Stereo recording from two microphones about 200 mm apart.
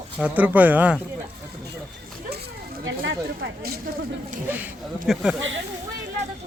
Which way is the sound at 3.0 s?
55° right (ahead or behind).